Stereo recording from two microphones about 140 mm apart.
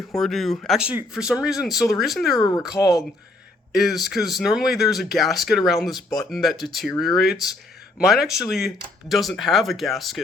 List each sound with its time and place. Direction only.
0.2 s speech: centre (ahead or behind)
2.4 s speech: 25° left (ahead or behind)
3.8 s speech: centre (ahead or behind)